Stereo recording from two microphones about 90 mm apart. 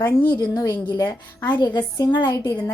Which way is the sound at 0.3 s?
45° left (ahead or behind).